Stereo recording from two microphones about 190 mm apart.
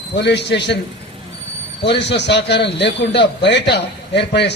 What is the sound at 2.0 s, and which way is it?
A man's voice, 65° left (ahead or behind).